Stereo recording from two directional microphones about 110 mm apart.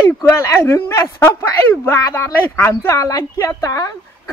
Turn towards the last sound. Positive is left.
turn(degrees=30)  # may be behind; listen again after turning